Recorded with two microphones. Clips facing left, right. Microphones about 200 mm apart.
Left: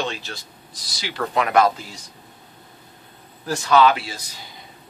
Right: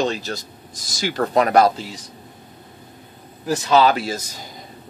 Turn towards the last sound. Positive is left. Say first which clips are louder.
# right 9 dB
turn(degrees=-45)  # may be behind; listen again after turning